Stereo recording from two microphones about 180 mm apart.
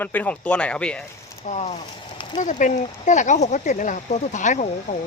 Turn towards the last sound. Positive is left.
turn(degrees=40)  # may be behind; listen again after turning